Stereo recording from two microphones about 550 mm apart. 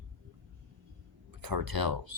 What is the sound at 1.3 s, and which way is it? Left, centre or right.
Speech, right.